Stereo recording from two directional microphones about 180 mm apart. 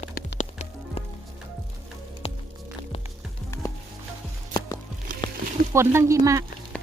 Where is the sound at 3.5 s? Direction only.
15° left (ahead or behind).